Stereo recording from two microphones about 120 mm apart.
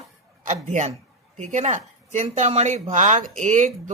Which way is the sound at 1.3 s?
75° right (ahead or behind).